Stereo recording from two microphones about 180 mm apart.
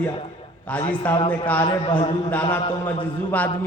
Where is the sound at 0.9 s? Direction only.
10° left (ahead or behind).